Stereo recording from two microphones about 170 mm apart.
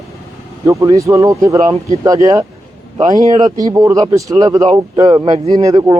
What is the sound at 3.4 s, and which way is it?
Speech, 20° right (ahead or behind).